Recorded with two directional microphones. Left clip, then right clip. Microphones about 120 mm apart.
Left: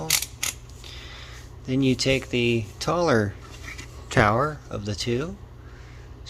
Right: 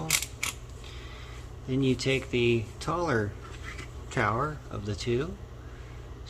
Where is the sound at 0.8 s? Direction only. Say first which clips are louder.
Left 6 dB; 60° left (ahead or behind).